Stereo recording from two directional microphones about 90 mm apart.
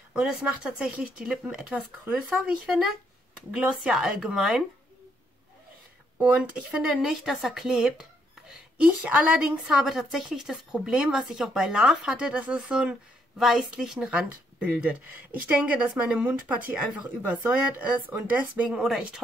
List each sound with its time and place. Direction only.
0.1 s speech: 5° right (ahead or behind)
6.1 s speech: 10° right (ahead or behind)
16.2 s speech: 20° right (ahead or behind)
18.7 s speech: 5° right (ahead or behind)